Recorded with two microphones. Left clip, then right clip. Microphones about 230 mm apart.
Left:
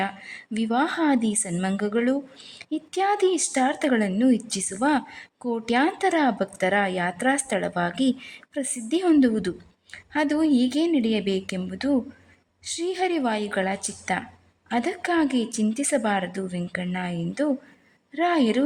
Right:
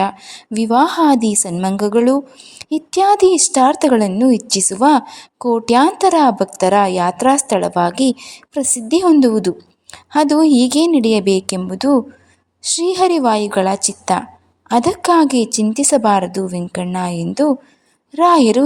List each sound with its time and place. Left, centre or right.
0.0 s a woman's voice: centre